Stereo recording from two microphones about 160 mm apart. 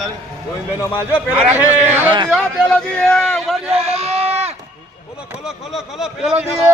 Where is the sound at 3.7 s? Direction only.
40° right (ahead or behind).